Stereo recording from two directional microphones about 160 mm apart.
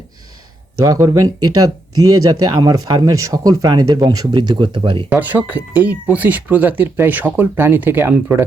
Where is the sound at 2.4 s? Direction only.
25° right (ahead or behind).